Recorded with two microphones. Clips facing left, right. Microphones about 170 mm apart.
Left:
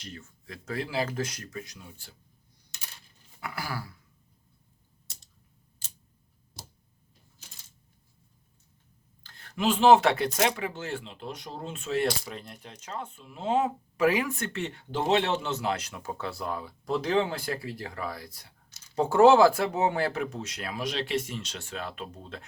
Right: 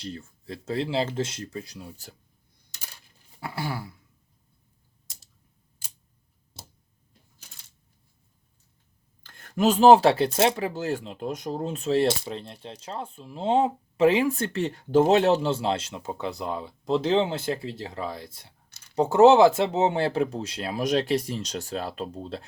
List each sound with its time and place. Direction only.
0.0 s speech: 30° right (ahead or behind)
3.4 s speech: 25° right (ahead or behind)
9.2 s speech: 45° right (ahead or behind); by 20.8 s 30° right (ahead or behind)
20.8 s speech: 40° right (ahead or behind)